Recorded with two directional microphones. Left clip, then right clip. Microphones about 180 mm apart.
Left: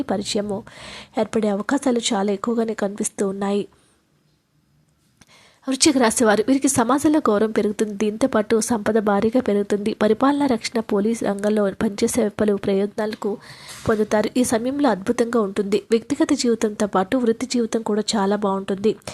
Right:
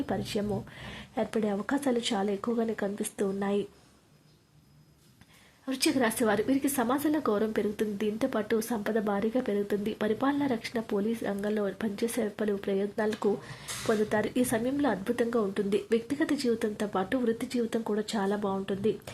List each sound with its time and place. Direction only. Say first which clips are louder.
0.0 s a woman's voice: left 9 dB; 30° left (ahead or behind)
5.6 s a woman's voice: left 10 dB; 35° left (ahead or behind)
13.1 s a woman's voice: left 3 dB; 25° left (ahead or behind)